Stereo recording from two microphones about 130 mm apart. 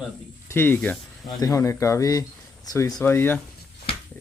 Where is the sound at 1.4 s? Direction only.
25° left (ahead or behind).